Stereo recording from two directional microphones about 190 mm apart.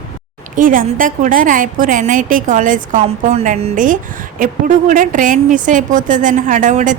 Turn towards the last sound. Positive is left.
turn(degrees=-40)  # may be behind; listen again after turning